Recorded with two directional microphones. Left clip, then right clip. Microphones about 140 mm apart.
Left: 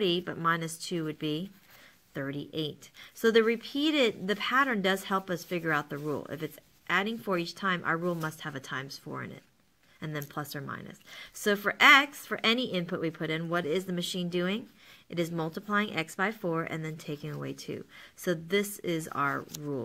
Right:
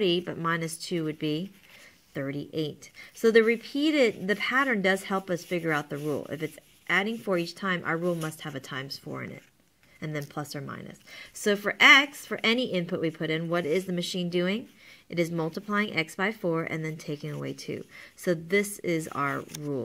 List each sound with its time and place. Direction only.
0.0 s speech: 25° right (ahead or behind)
19.3 s speech: 20° right (ahead or behind)